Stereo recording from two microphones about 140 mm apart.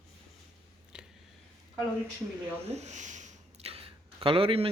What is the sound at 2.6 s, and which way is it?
Speech, 55° right (ahead or behind).